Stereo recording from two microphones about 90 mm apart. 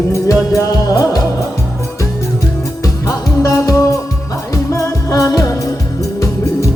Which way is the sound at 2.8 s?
40° left (ahead or behind).